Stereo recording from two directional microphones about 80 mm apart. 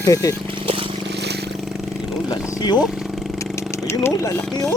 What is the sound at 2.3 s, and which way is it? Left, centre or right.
Speech, left.